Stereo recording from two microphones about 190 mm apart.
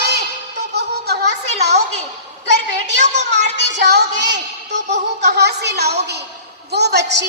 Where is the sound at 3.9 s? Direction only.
65° right (ahead or behind).